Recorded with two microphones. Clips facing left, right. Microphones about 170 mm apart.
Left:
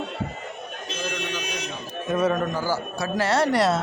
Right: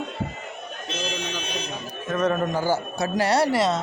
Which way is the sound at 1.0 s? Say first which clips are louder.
Left 2 dB; 65° left (ahead or behind).